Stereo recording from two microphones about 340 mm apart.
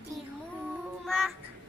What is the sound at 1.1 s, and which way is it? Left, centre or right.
Child singing, centre.